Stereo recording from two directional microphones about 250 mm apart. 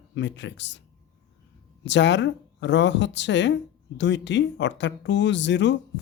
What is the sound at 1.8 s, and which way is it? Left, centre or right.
Speech, left.